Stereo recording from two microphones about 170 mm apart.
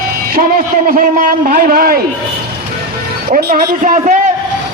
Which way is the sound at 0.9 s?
55° right (ahead or behind).